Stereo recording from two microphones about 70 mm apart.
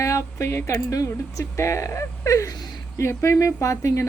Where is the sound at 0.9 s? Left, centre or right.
Left.